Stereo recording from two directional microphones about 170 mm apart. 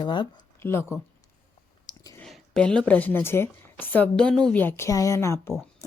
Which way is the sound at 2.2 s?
5° left (ahead or behind).